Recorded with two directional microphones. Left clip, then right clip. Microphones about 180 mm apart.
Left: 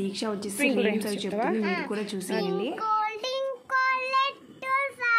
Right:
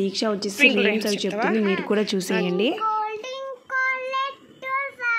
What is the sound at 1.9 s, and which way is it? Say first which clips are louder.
Speech: right 8 dB; 40° right (ahead or behind).